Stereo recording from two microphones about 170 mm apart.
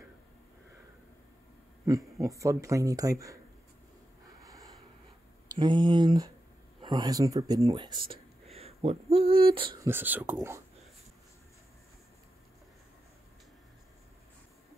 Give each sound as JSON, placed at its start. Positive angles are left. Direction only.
{"t": 1.9, "sound": "speech", "side_deg": -20}
{"t": 4.4, "sound": "snort", "side_deg": -20}
{"t": 5.5, "sound": "speech", "side_deg": -25}
{"t": 9.8, "sound": "speech", "side_deg": -10}